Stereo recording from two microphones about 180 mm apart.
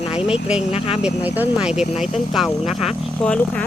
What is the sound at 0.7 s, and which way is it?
Speech, 30° left (ahead or behind).